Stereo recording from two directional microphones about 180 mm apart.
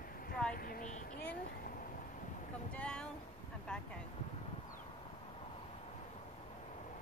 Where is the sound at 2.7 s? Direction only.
5° left (ahead or behind).